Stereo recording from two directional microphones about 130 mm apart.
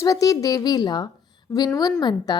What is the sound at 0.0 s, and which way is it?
A woman's voice, 25° left (ahead or behind).